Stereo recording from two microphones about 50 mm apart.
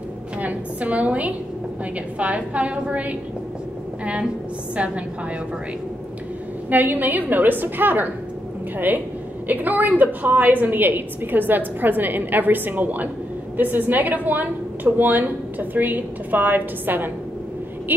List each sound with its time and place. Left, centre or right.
0.4 s a woman's voice: right
6.7 s a woman's voice: right